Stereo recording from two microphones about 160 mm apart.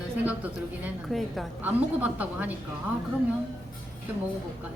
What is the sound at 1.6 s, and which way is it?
Speech, 10° right (ahead or behind).